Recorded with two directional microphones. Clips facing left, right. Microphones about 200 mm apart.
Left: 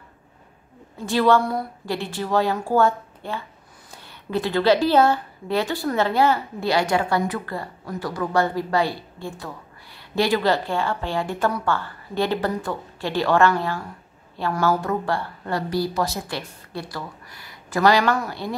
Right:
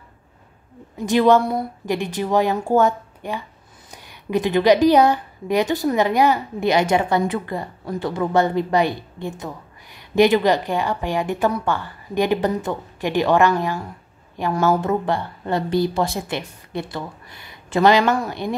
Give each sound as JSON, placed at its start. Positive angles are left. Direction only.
{"t": 0.9, "sound": "a woman's voice", "side_deg": -15}